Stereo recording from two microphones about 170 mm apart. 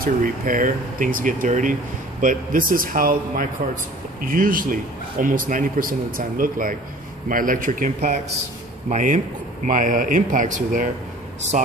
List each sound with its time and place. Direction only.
0.0 s speech: 50° right (ahead or behind)